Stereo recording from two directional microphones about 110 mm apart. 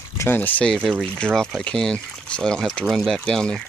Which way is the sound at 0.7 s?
5° left (ahead or behind).